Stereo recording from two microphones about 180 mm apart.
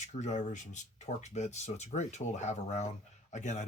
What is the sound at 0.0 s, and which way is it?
Speech, 40° left (ahead or behind).